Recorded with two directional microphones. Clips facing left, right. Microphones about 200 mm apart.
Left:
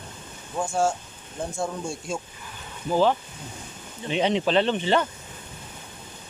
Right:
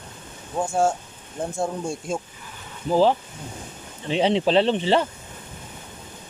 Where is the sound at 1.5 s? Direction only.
55° right (ahead or behind).